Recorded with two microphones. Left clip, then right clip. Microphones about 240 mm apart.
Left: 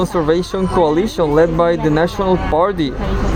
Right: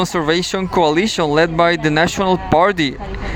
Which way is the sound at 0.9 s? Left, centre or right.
Right.